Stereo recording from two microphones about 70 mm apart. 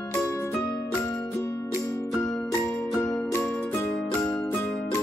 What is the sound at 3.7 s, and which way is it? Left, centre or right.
Music, left.